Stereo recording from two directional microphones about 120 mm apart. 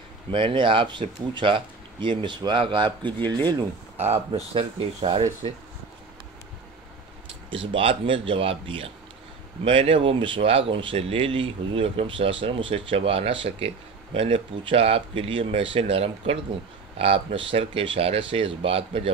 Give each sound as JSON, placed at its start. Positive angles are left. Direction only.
{"t": 0.3, "sound": "speech", "side_deg": -45}
{"t": 3.2, "sound": "speech", "side_deg": 15}
{"t": 4.6, "sound": "speech", "side_deg": -50}
{"t": 7.5, "sound": "speech", "side_deg": -45}